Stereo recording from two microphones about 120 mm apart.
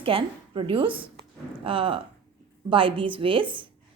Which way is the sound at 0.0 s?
50° right (ahead or behind).